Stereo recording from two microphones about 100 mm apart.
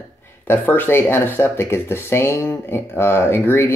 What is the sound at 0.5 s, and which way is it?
Speech, 20° left (ahead or behind).